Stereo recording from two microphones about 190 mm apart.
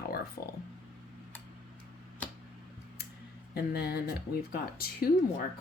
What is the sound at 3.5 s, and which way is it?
Speech, 55° left (ahead or behind).